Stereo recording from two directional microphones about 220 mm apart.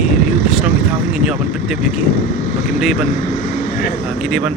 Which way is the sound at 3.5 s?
35° left (ahead or behind).